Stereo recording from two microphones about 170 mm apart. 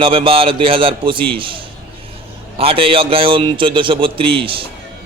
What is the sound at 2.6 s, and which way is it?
A man's voice, 35° right (ahead or behind).